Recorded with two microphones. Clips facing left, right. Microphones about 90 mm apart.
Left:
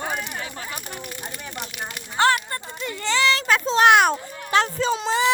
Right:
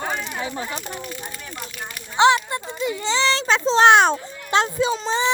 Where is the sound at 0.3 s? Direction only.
20° right (ahead or behind).